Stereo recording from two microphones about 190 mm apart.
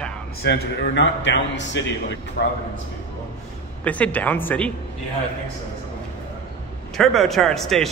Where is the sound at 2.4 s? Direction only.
60° left (ahead or behind).